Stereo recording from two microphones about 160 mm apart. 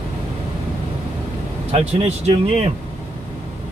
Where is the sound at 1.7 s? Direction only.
40° right (ahead or behind).